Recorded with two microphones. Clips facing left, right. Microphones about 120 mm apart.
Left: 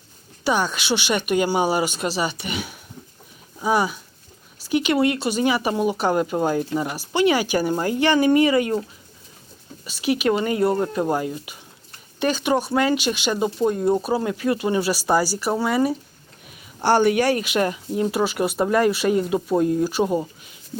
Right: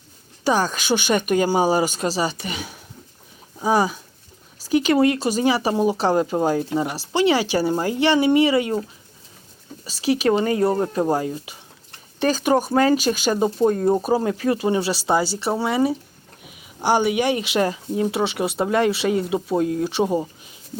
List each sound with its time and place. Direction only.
0.4 s speech: 40° right (ahead or behind)
9.8 s speech: 35° right (ahead or behind)
16.5 s speech: 15° right (ahead or behind)
19.3 s speech: 15° right (ahead or behind)
20.0 s speech: 25° right (ahead or behind)